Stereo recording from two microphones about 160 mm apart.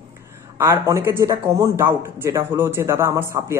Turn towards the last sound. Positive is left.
turn(degrees=-20)  # may be behind; listen again after turning